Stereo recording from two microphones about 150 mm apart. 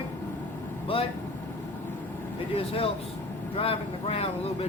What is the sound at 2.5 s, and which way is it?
Speech, 40° left (ahead or behind).